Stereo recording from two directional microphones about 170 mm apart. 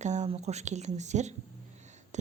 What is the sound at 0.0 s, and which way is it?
A woman's voice, 40° right (ahead or behind).